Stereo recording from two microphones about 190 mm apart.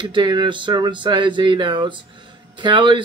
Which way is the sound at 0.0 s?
25° right (ahead or behind).